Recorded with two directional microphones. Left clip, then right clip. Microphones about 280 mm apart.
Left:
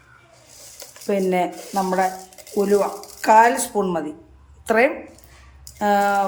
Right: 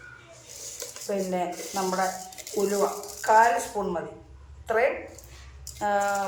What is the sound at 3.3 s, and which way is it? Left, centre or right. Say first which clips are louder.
Speech: left 6 dB; left.